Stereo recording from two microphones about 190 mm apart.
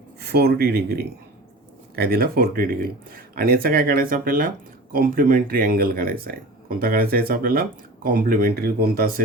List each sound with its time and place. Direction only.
0.2 s speech: 55° right (ahead or behind)